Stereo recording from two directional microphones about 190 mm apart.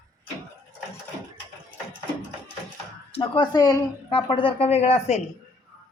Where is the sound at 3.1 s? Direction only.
25° left (ahead or behind).